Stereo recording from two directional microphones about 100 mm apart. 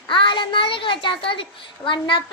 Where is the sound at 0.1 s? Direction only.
55° left (ahead or behind).